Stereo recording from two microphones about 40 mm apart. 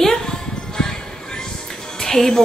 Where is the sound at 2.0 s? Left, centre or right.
Centre.